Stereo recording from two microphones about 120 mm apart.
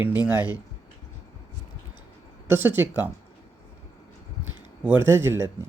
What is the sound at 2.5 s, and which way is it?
Speech, 15° right (ahead or behind).